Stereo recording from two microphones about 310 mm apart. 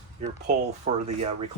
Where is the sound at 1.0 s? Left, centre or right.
Right.